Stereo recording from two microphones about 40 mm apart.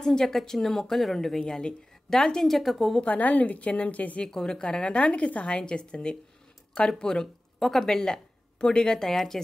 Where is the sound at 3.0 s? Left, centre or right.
Left.